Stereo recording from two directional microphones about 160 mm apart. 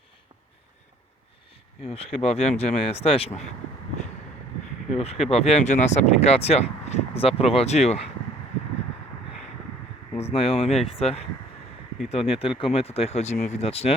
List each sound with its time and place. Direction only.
1.8 s speech: 40° left (ahead or behind)
4.9 s speech: 40° left (ahead or behind)
10.2 s speech: 40° left (ahead or behind)